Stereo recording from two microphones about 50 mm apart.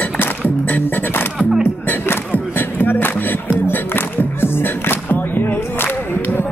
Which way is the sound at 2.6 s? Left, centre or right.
Left.